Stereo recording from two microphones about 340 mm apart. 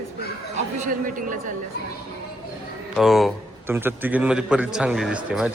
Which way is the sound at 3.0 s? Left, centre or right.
Centre.